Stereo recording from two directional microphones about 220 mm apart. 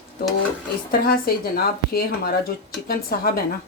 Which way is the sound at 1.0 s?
45° left (ahead or behind).